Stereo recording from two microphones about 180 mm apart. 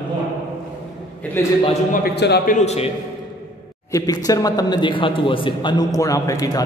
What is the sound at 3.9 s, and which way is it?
A man's voice, 20° left (ahead or behind).